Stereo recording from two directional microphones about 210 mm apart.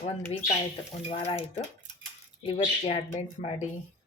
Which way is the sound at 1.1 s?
25° left (ahead or behind).